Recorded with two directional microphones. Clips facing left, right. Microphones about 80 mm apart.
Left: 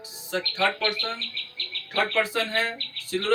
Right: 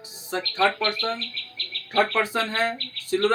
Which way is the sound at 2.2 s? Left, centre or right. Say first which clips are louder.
Right 1 dB; right.